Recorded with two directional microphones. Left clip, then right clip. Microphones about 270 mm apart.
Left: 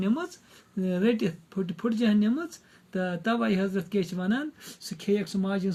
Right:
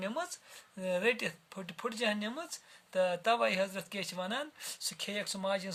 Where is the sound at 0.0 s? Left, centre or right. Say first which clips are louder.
Left 6 dB; right.